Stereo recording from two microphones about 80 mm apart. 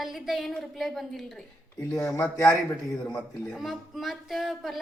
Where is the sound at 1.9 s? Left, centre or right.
Left.